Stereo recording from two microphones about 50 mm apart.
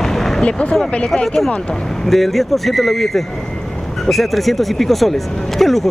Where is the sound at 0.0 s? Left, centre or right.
Centre.